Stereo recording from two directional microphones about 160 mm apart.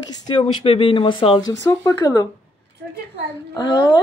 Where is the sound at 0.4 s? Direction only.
35° left (ahead or behind).